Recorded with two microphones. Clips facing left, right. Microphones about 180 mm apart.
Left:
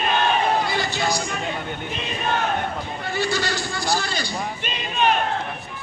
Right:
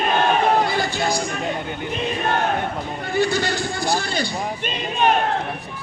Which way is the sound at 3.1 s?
55° right (ahead or behind).